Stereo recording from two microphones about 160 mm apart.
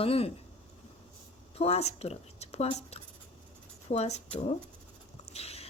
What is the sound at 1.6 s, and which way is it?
A woman's voice, 40° left (ahead or behind).